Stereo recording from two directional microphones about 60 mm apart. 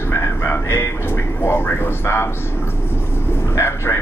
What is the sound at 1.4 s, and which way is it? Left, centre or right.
Speech, left.